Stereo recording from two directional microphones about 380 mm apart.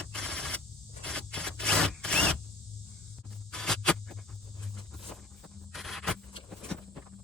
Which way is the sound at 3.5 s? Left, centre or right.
Centre.